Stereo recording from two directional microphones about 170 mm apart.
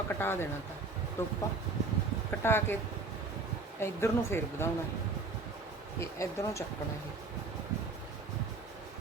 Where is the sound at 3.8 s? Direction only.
15° left (ahead or behind).